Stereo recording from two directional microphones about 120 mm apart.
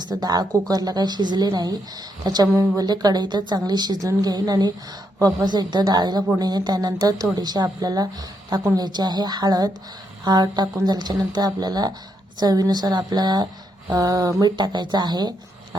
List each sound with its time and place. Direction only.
0.0 s a woman's voice: 35° right (ahead or behind)